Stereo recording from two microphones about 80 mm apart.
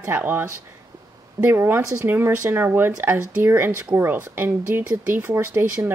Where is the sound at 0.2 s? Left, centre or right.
Right.